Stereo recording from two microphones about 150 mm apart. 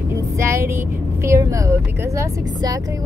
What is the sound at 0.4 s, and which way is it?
Child singing, 20° right (ahead or behind).